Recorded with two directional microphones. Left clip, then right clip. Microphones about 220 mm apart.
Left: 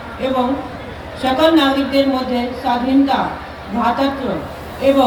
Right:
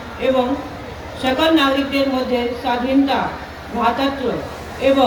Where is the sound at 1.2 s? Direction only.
50° left (ahead or behind).